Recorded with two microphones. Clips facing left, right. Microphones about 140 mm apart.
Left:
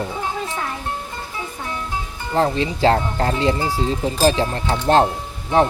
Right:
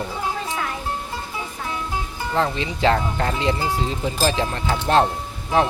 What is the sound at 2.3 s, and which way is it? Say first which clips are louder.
Speech: left 4 dB; 35° left (ahead or behind).